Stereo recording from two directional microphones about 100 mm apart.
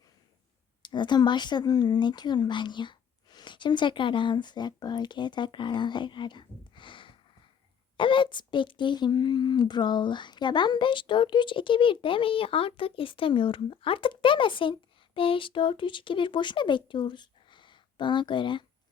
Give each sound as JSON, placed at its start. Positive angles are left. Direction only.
{"t": 0.8, "sound": "a woman's voice", "side_deg": 50}